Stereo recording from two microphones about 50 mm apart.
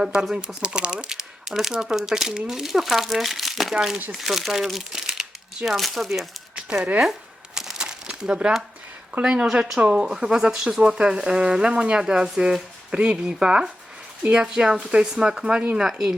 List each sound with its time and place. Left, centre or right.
0.0 s speech: centre
6.6 s a sound: centre
7.0 s crumpling: centre
9.2 s speech: centre